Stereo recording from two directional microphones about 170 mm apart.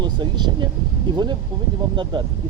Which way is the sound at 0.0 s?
25° right (ahead or behind).